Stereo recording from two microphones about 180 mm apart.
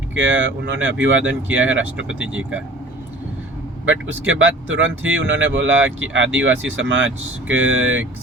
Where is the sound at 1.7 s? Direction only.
90° right.